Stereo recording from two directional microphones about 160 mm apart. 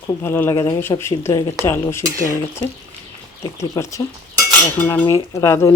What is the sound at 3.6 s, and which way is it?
Speech, 20° left (ahead or behind).